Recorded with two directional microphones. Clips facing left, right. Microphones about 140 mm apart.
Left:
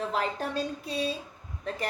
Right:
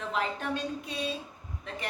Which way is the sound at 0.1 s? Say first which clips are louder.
Left 1 dB; 35° left (ahead or behind).